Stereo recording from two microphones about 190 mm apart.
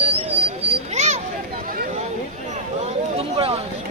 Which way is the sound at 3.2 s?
30° right (ahead or behind).